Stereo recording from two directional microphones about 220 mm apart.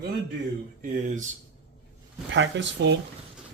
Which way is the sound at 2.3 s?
55° right (ahead or behind).